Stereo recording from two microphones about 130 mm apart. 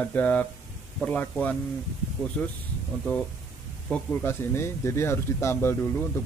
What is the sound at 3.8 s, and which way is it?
Speech, 10° left (ahead or behind).